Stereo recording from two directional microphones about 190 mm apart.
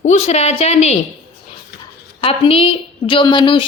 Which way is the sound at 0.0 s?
35° left (ahead or behind).